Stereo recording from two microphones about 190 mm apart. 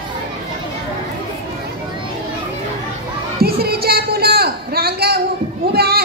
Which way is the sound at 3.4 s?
55° right (ahead or behind).